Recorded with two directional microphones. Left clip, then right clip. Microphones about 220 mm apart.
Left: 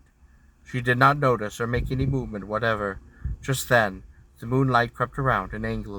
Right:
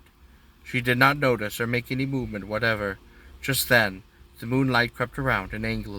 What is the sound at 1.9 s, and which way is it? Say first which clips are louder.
Speech: even; 10° right (ahead or behind).